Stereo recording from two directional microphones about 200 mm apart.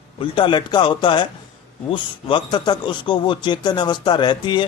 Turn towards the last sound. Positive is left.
turn(degrees=20)  # may be behind; listen again after turning